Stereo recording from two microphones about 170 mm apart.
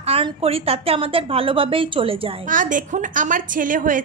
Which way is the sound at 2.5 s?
50° right (ahead or behind).